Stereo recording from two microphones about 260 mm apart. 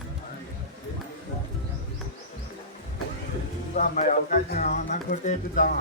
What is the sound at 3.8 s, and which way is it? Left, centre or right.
A man's voice, left.